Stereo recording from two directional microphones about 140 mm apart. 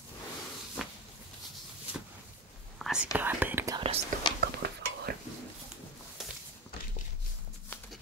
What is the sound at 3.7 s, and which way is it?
Whispering, 40° right (ahead or behind).